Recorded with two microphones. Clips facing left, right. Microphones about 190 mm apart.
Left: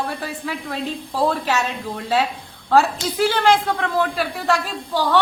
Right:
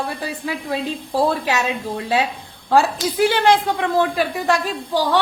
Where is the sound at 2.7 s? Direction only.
15° right (ahead or behind).